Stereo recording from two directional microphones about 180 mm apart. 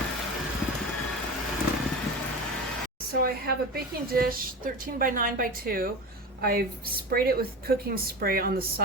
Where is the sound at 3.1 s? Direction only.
55° right (ahead or behind).